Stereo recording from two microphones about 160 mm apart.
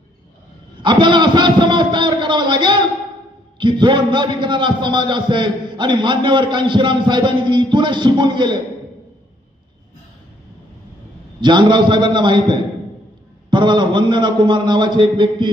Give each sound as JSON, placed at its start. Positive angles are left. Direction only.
{"t": 0.8, "sound": "a man's voice", "side_deg": -30}
{"t": 11.3, "sound": "a man's voice", "side_deg": -30}